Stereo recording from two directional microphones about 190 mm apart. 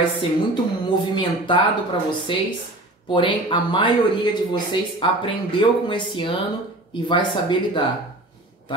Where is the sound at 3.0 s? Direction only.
25° left (ahead or behind).